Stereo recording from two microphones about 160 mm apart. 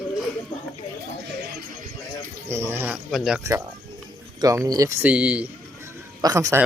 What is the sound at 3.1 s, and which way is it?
Speech, centre (ahead or behind).